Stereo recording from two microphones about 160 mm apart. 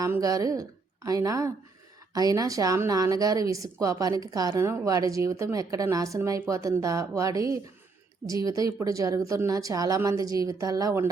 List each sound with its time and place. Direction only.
0.0 s a woman's voice: 20° right (ahead or behind)